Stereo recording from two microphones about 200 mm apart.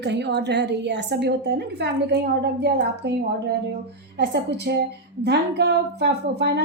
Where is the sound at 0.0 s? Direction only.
60° right (ahead or behind).